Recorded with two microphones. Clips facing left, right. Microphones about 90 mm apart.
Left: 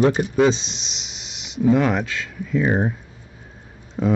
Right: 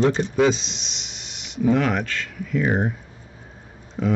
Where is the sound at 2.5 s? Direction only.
25° left (ahead or behind).